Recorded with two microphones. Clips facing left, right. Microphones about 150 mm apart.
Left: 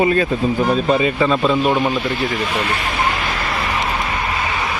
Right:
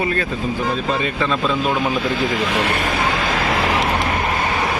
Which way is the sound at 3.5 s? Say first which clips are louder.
Right 2 dB; 90° right.